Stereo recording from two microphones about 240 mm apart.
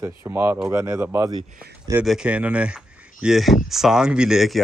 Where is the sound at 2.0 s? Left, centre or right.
Centre.